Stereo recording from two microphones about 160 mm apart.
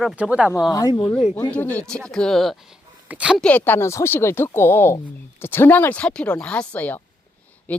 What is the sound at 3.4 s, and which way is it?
Speech, 10° left (ahead or behind).